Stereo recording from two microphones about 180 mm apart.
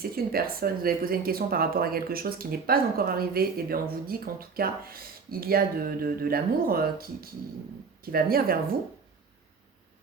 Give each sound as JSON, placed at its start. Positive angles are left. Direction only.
{"t": 0.0, "sound": "speech", "side_deg": -55}